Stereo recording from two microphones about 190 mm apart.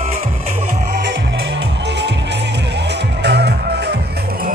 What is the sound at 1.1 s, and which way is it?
Music, 70° right (ahead or behind).